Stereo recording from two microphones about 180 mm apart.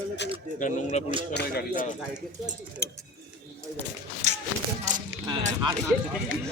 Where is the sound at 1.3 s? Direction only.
60° left (ahead or behind).